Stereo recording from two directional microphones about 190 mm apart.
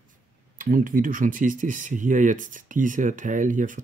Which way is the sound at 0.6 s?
45° right (ahead or behind).